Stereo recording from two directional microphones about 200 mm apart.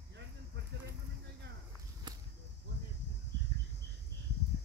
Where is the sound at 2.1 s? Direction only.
20° right (ahead or behind).